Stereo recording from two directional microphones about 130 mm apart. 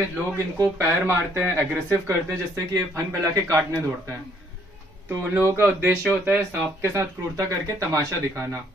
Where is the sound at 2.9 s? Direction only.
25° right (ahead or behind).